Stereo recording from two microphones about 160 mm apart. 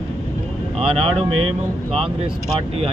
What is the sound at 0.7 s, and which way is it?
Speech, 35° right (ahead or behind).